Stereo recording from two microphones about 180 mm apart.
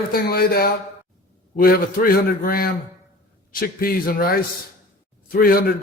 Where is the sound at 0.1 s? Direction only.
60° left (ahead or behind).